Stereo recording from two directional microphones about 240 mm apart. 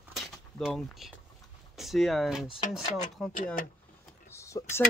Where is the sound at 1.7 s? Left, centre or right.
Centre.